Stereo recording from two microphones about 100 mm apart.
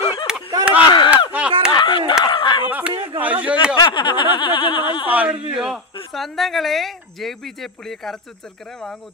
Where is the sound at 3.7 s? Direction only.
50° left (ahead or behind).